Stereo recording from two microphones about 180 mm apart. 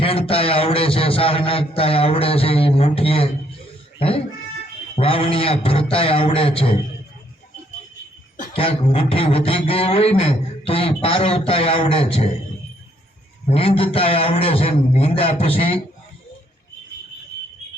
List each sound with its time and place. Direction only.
0.0 s speech: 30° left (ahead or behind)
8.5 s speech: 30° left (ahead or behind)
13.5 s speech: 30° left (ahead or behind)